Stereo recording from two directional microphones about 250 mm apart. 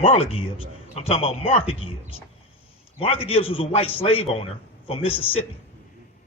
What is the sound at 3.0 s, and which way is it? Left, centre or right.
Speech, left.